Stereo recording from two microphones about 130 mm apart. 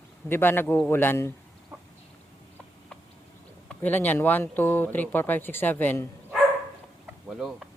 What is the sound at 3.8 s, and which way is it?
Speech, 15° left (ahead or behind).